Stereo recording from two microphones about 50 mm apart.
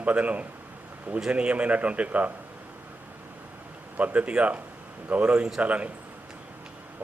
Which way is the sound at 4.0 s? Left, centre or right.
Right.